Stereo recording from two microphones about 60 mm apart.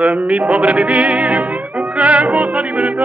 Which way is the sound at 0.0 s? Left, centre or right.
Right.